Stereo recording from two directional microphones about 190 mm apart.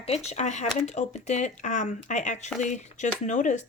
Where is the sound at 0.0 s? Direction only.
35° left (ahead or behind).